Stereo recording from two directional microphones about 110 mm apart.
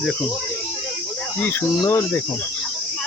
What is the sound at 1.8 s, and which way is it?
Speech, 25° left (ahead or behind).